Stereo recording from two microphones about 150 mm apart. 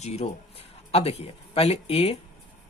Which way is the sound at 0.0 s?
45° left (ahead or behind).